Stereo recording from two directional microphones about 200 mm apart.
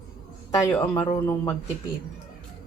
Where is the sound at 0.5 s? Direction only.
10° left (ahead or behind).